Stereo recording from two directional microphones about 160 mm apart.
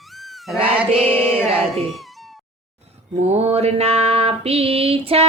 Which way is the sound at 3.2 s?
40° right (ahead or behind).